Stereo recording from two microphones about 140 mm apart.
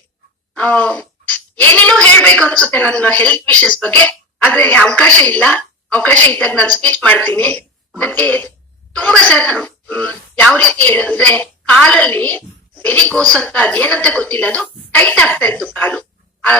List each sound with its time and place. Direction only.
0.5 s a woman's voice: 10° left (ahead or behind)